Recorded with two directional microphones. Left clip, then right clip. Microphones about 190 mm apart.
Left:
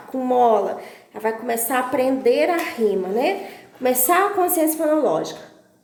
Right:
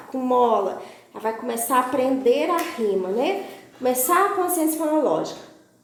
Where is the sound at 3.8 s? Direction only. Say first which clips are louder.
Left 2 dB; 35° left (ahead or behind).